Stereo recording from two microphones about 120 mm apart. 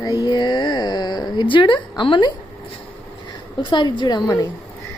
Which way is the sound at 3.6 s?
40° left (ahead or behind).